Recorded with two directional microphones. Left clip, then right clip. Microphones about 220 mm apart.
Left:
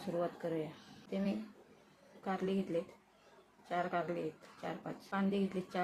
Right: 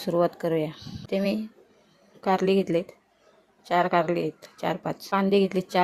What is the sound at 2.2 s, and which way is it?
A woman's voice, 45° right (ahead or behind).